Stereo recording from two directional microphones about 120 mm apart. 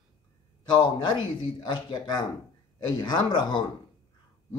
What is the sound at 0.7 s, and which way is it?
A man's voice, 40° left (ahead or behind).